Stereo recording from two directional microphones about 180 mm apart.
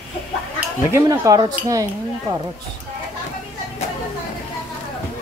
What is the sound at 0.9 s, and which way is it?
Speech, 20° right (ahead or behind).